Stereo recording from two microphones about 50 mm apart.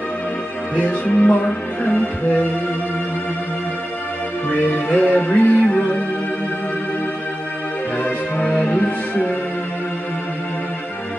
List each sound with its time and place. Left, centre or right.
0.7 s music: left
4.5 s music: left
8.4 s music: left